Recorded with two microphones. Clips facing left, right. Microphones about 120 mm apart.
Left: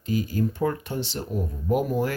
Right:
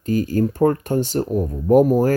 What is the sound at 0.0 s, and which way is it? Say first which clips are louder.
Speech: right 6 dB; 45° right (ahead or behind).